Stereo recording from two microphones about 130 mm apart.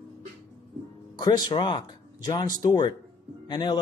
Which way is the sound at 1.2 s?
30° left (ahead or behind).